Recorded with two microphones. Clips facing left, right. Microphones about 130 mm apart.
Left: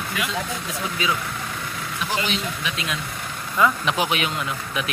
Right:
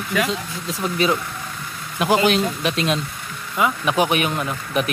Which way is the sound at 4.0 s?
45° right (ahead or behind).